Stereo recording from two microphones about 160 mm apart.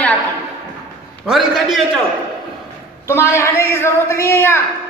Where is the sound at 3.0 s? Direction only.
15° left (ahead or behind).